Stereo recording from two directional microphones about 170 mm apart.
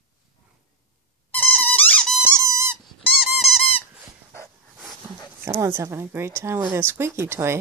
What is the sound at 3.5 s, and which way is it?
Squeak, 35° left (ahead or behind).